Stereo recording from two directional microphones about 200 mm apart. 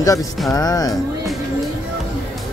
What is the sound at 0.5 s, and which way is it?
Music, 20° left (ahead or behind).